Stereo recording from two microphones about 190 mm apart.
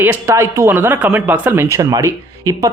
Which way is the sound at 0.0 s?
10° right (ahead or behind).